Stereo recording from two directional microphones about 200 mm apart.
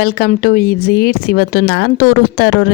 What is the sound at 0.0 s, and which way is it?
Speech, 50° left (ahead or behind).